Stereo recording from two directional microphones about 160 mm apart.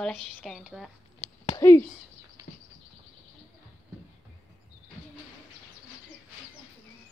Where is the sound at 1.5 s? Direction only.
20° left (ahead or behind).